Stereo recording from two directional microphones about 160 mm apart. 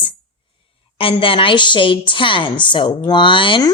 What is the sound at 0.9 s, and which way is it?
A woman's voice, 35° left (ahead or behind).